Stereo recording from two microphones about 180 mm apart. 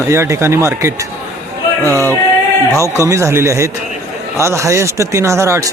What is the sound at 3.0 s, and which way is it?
Speech, 15° right (ahead or behind).